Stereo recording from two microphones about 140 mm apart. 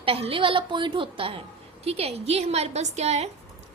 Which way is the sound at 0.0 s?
45° right (ahead or behind).